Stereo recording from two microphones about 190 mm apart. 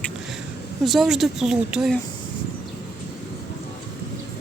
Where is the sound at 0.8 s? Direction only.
Centre (ahead or behind).